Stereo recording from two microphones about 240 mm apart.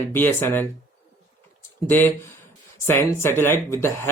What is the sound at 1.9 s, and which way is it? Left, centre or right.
Speech, centre.